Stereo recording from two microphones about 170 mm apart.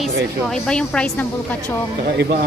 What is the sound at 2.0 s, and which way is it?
Speech, 65° right (ahead or behind).